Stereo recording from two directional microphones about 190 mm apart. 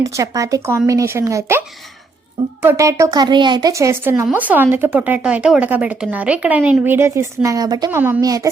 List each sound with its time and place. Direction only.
0.0 s speech: 15° right (ahead or behind)